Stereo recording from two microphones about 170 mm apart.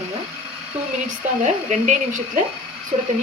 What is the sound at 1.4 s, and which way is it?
Speech, 45° right (ahead or behind).